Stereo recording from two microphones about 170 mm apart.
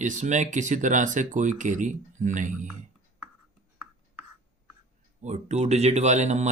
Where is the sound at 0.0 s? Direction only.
45° right (ahead or behind).